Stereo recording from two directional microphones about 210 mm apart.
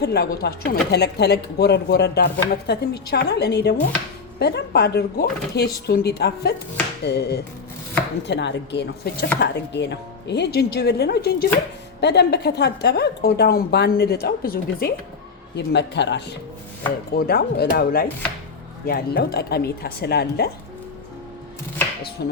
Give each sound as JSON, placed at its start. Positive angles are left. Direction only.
{"t": 0.0, "sound": "a woman's voice", "side_deg": 50}
{"t": 22.2, "sound": "a woman's voice", "side_deg": 50}